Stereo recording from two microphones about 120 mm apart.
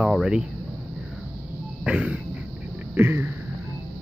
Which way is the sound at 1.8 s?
10° right (ahead or behind).